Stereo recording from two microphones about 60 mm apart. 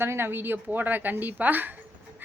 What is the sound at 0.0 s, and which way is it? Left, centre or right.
A woman's voice, right.